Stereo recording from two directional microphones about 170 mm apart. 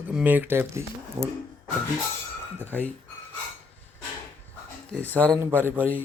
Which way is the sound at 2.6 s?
10° left (ahead or behind).